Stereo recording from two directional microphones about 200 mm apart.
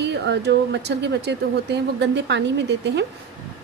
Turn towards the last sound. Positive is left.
turn(degrees=-60)  # may be behind; listen again after turning